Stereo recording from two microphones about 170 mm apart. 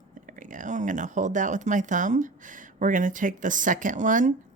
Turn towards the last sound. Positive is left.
turn(degrees=-50)  # may be behind; listen again after turning